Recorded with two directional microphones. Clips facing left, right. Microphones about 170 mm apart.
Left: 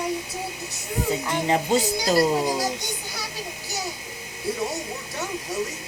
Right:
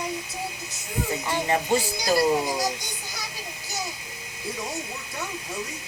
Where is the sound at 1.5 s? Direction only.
20° left (ahead or behind).